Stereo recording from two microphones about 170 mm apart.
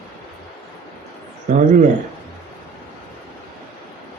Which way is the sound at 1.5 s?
45° right (ahead or behind).